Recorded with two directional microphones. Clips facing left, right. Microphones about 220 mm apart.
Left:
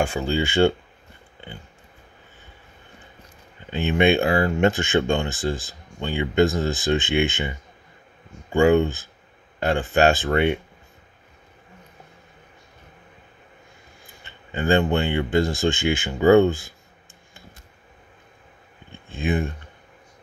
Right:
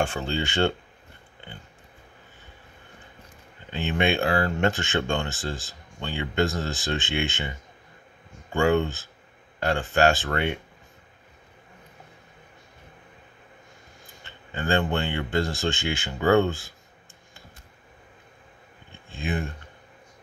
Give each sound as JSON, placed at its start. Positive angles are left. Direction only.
{"t": 0.0, "sound": "speech", "side_deg": 10}
{"t": 3.7, "sound": "speech", "side_deg": 15}
{"t": 14.2, "sound": "speech", "side_deg": 15}
{"t": 19.0, "sound": "speech", "side_deg": 20}